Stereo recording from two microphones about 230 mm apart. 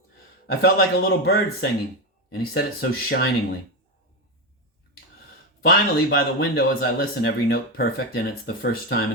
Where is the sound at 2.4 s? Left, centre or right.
Left.